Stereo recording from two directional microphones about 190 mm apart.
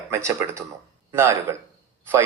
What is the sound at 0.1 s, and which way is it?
A man's voice, 15° right (ahead or behind).